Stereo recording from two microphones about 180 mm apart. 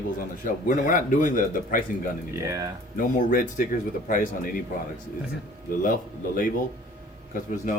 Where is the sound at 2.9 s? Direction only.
50° left (ahead or behind).